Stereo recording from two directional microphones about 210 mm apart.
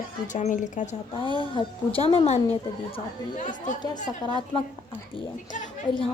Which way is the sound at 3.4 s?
35° left (ahead or behind).